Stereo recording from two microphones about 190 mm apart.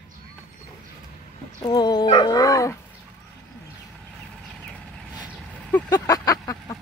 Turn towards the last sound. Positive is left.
turn(degrees=20)  # may be behind; listen again after turning